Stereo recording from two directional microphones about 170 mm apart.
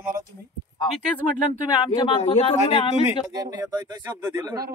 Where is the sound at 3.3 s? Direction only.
25° right (ahead or behind).